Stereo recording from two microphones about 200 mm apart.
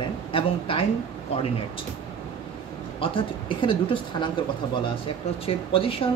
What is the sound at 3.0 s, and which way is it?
Speech, 25° left (ahead or behind).